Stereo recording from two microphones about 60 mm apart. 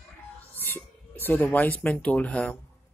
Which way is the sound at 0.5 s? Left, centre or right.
Left.